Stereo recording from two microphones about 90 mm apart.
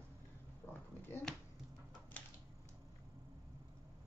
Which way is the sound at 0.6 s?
20° left (ahead or behind).